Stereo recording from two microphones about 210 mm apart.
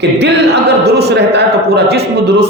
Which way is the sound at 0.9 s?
50° right (ahead or behind).